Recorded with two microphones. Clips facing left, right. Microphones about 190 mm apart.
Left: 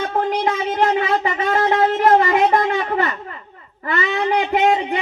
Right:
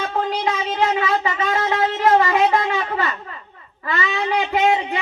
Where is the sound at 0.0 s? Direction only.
55° left (ahead or behind).